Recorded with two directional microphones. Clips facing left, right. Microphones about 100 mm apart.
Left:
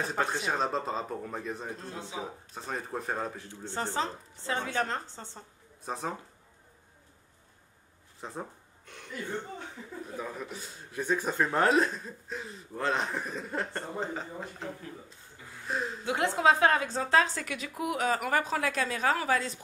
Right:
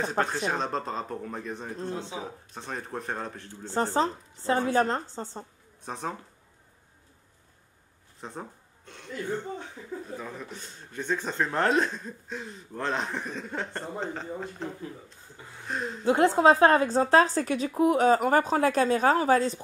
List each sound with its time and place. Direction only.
0.2 s a man's voice: centre (ahead or behind)
1.8 s speech: 25° right (ahead or behind)
2.5 s a man's voice: centre (ahead or behind)
3.6 s a woman's voice: 40° right (ahead or behind)
5.9 s a man's voice: centre (ahead or behind)
8.2 s speech: centre (ahead or behind)
10.1 s a man's voice: 5° left (ahead or behind)
16.1 s a woman's voice: 35° right (ahead or behind)